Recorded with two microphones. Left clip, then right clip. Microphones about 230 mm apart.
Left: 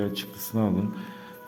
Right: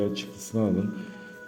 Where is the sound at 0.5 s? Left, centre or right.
Left.